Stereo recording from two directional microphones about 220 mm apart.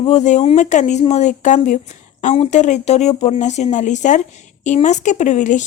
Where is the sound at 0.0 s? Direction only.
30° left (ahead or behind).